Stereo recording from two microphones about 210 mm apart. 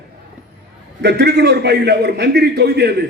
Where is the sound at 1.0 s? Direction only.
50° right (ahead or behind).